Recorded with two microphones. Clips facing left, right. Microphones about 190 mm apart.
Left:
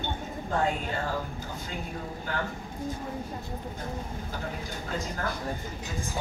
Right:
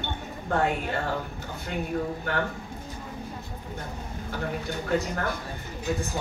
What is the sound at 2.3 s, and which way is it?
Speech, 65° right (ahead or behind).